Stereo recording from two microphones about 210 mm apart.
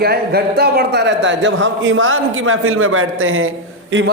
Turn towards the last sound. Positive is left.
turn(degrees=-70)  # may be behind; listen again after turning